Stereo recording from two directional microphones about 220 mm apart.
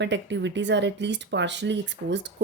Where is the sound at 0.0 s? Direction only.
55° right (ahead or behind).